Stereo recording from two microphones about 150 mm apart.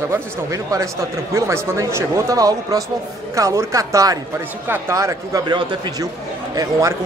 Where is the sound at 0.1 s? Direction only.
20° right (ahead or behind).